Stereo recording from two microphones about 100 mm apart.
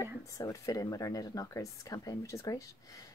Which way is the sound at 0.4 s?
30° left (ahead or behind).